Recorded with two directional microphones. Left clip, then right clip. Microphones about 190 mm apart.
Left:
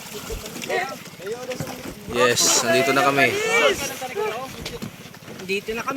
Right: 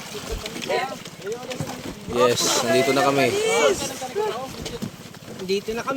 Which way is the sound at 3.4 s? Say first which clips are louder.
Left 1 dB; 15° left (ahead or behind).